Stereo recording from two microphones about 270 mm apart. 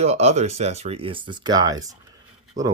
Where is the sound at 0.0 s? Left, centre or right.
Right.